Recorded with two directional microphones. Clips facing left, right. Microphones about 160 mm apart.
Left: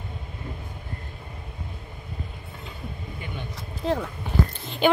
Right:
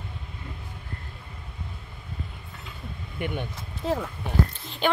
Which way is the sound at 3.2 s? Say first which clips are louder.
Right 11 dB; 65° right (ahead or behind).